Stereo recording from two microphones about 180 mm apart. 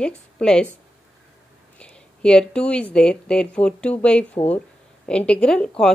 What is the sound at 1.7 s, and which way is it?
Speech, 5° left (ahead or behind).